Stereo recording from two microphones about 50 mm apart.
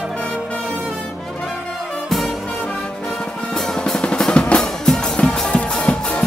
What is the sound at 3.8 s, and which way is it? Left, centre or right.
Drum, centre.